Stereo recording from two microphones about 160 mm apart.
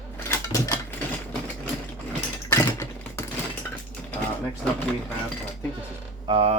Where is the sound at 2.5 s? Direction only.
15° left (ahead or behind).